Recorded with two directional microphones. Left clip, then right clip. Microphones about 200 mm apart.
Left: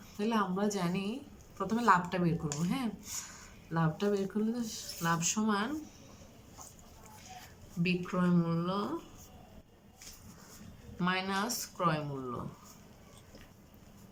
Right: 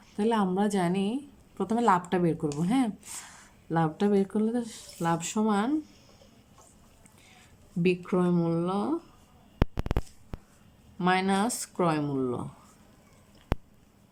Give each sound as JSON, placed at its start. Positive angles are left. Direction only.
{"t": 0.2, "sound": "a woman's voice", "side_deg": -40}
{"t": 7.8, "sound": "a woman's voice", "side_deg": -40}
{"t": 11.0, "sound": "speech", "side_deg": -45}